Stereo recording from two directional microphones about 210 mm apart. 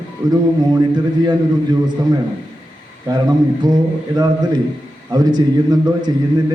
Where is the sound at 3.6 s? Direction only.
20° right (ahead or behind).